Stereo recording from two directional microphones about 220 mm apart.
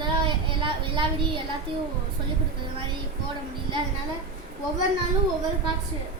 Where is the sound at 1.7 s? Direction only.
25° right (ahead or behind).